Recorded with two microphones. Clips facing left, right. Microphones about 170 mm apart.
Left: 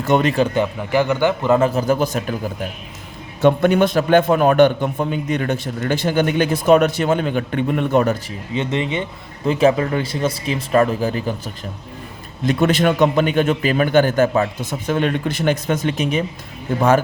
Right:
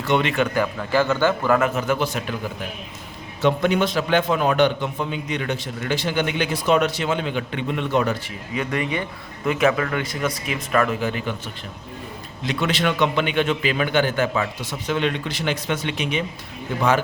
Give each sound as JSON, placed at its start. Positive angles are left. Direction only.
{"t": 0.0, "sound": "speech", "side_deg": 45}
{"t": 0.5, "sound": "a man's voice", "side_deg": 20}
{"t": 3.4, "sound": "a man's voice", "side_deg": 50}
{"t": 8.5, "sound": "a man's voice", "side_deg": 25}